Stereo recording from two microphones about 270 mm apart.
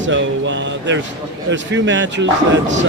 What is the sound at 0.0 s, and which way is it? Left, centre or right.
Speech, right.